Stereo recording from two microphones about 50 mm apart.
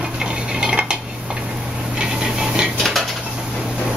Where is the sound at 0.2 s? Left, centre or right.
Centre.